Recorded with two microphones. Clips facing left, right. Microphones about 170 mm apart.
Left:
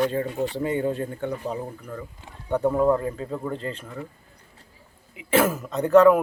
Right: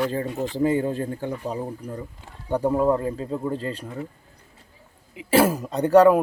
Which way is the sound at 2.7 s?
15° right (ahead or behind).